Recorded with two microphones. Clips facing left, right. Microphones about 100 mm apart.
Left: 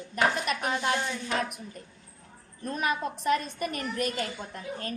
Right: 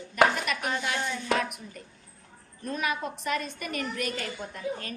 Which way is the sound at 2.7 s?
35° left (ahead or behind).